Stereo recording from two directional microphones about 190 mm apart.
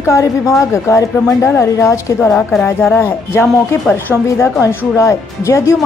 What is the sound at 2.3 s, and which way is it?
Speech, centre (ahead or behind).